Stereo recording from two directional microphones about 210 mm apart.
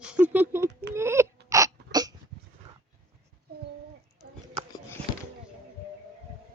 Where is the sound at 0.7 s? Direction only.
55° right (ahead or behind).